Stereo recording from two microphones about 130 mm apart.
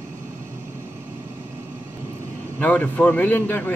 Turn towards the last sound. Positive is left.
turn(degrees=15)  # may be behind; listen again after turning